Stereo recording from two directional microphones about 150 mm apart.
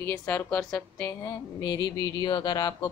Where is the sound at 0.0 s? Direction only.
15° left (ahead or behind).